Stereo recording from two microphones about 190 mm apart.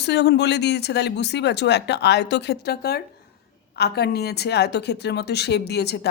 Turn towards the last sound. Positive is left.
turn(degrees=60)  # may be behind; listen again after turning